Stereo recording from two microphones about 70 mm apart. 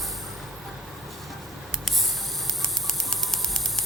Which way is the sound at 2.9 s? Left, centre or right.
Centre.